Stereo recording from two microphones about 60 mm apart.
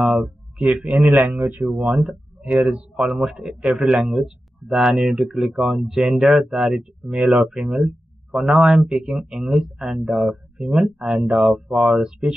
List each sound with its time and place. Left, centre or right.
0.0 s speech: centre
1.0 s speech: right
1.8 s speech: centre
3.1 s speech: centre